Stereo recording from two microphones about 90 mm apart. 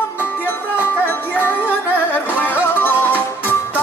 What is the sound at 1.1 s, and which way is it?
Music, 20° left (ahead or behind).